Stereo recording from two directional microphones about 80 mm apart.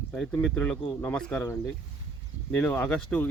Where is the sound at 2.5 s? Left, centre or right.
Left.